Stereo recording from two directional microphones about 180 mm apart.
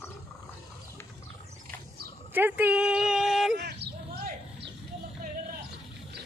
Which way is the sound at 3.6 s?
65° right (ahead or behind).